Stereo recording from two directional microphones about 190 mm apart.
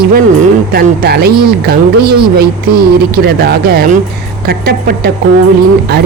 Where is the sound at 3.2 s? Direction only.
55° right (ahead or behind).